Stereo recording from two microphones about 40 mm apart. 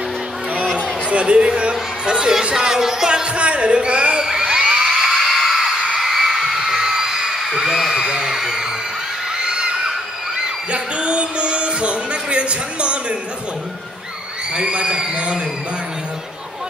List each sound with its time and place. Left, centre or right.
1.1 s speech: right
3.3 s speech: right
4.3 s whoop: centre
5.0 s screaming: centre
5.9 s whoop: centre
9.5 s a sound: centre
10.7 s music: right
14.5 s a man's voice: right